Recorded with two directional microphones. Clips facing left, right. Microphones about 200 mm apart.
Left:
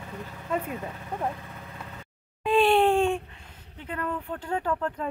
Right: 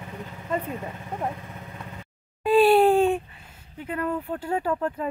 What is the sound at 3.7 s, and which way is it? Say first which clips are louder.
Speech: right 4 dB; 10° right (ahead or behind).